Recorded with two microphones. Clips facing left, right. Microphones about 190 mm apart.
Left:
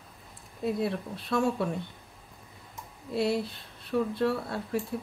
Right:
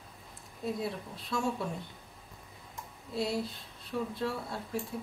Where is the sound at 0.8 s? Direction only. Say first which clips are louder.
Left 6 dB; 60° left (ahead or behind).